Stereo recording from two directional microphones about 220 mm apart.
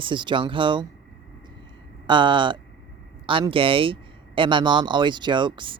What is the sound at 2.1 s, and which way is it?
Speech, 20° right (ahead or behind).